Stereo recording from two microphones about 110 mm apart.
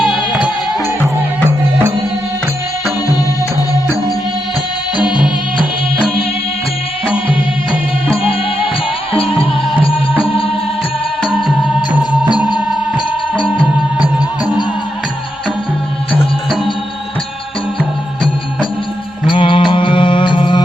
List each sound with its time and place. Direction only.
9.1 s music: 55° left (ahead or behind)
11.2 s music: 5° left (ahead or behind)
19.3 s music: 50° left (ahead or behind)